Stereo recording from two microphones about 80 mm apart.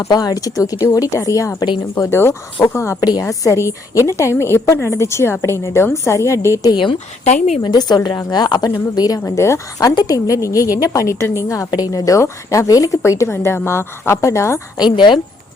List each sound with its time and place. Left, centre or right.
0.1 s a woman's voice: left
2.0 s a woman's voice: left
3.0 s a woman's voice: left
6.7 s speech: left
7.6 s speech: left
9.9 s a woman's voice: left
11.7 s a woman's voice: left
14.8 s a woman's voice: left